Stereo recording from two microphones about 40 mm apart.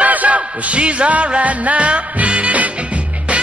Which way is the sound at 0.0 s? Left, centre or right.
Right.